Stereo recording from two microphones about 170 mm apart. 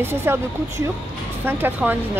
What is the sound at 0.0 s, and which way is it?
Speech, 15° right (ahead or behind).